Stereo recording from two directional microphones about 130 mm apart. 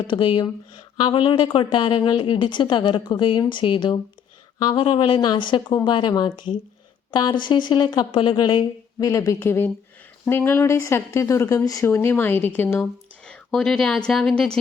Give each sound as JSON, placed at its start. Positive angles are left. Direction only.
{"t": 0.1, "sound": "speech", "side_deg": 40}
{"t": 13.2, "sound": "speech", "side_deg": 5}